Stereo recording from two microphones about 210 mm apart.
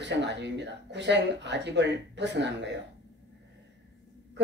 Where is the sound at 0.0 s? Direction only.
55° right (ahead or behind).